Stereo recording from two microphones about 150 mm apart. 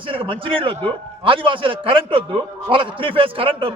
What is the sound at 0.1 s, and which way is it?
A man's voice, 35° right (ahead or behind).